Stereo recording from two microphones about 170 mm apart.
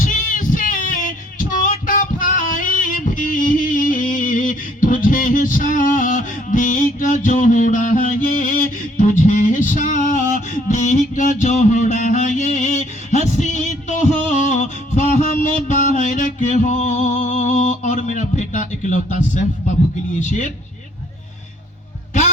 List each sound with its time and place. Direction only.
0.0 s female singing: 50° left (ahead or behind)
1.4 s music: 50° left (ahead or behind)
20.1 s speech: 45° left (ahead or behind)